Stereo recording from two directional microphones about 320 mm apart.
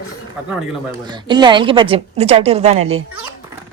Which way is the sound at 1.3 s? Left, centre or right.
Centre.